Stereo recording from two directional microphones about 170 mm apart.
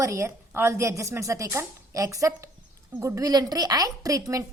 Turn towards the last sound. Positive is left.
turn(degrees=-20)  # may be behind; listen again after turning